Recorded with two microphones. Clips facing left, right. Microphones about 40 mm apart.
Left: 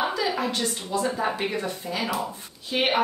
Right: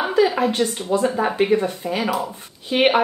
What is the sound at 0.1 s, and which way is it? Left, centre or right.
A woman's voice, right.